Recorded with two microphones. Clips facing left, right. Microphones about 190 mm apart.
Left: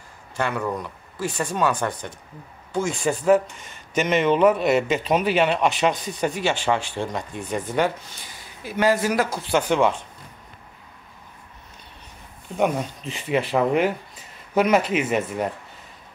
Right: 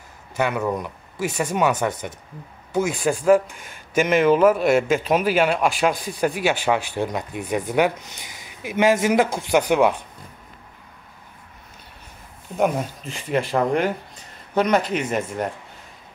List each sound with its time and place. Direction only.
0.4 s speech: 10° right (ahead or behind)
1.8 s a man's voice: 10° right (ahead or behind)
12.5 s a man's voice: centre (ahead or behind)